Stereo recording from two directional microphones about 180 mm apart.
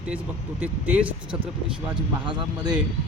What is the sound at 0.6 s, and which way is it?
Speech, 10° right (ahead or behind).